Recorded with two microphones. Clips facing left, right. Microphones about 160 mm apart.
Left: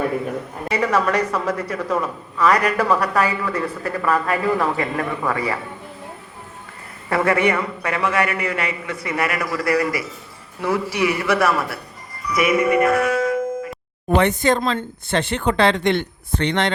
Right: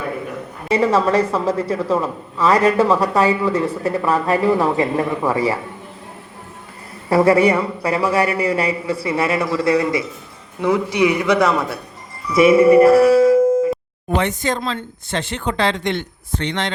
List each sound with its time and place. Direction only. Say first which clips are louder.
0.7 s a woman's voice: right 4 dB; 25° right (ahead or behind)
7.1 s a man's voice: right 5 dB; 35° right (ahead or behind)
14.2 s speech: left 3 dB; 60° left (ahead or behind)